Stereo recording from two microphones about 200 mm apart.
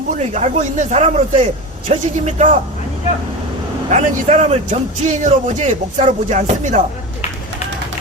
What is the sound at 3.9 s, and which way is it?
Speech, 35° right (ahead or behind).